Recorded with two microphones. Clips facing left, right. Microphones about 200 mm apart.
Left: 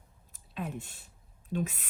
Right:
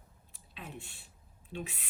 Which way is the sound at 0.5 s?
45° left (ahead or behind).